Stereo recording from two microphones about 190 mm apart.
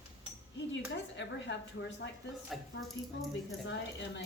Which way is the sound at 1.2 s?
70° left (ahead or behind).